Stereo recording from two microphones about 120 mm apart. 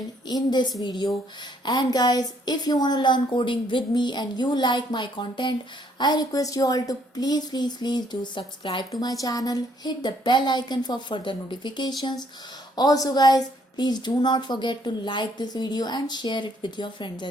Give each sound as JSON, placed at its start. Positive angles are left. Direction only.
{"t": 0.3, "sound": "a woman's voice", "side_deg": 35}
{"t": 9.0, "sound": "a woman's voice", "side_deg": 30}